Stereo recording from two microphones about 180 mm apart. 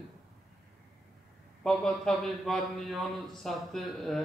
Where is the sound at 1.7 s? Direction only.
Centre (ahead or behind).